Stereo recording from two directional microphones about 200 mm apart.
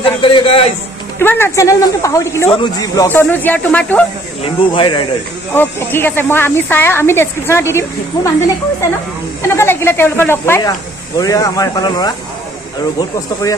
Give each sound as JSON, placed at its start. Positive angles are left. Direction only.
{"t": 0.0, "sound": "a man's voice", "side_deg": 25}
{"t": 1.2, "sound": "speech", "side_deg": 10}
{"t": 4.4, "sound": "a man's voice", "side_deg": 25}
{"t": 5.5, "sound": "speech", "side_deg": 10}